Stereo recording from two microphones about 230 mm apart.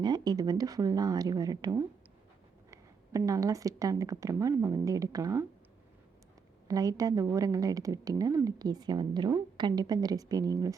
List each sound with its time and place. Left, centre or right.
0.0 s a woman's voice: centre
6.7 s a woman's voice: centre